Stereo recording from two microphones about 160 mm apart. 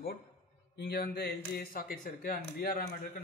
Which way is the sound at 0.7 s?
75° left (ahead or behind).